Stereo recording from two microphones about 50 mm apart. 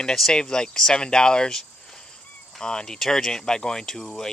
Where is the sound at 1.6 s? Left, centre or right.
Centre.